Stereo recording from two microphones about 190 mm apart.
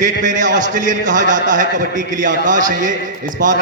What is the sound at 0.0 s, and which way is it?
A man's voice, 40° right (ahead or behind).